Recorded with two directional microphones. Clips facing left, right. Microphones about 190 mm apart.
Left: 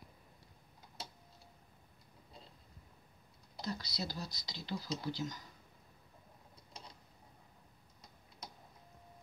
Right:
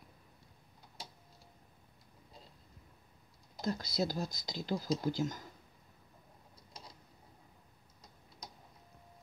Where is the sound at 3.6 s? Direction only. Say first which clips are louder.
Right 7 dB; 50° right (ahead or behind).